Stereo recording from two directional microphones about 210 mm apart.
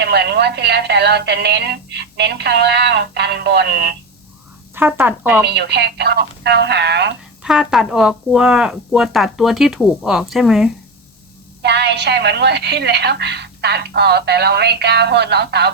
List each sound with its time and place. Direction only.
0.0 s a woman's voice: 50° right (ahead or behind)
4.7 s speech: 10° right (ahead or behind)
5.5 s a woman's voice: 55° right (ahead or behind)
7.4 s speech: 5° right (ahead or behind)
11.6 s a woman's voice: 55° right (ahead or behind)